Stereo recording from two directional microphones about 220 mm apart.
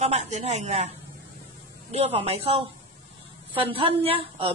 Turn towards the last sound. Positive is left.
turn(degrees=-25)  # may be behind; listen again after turning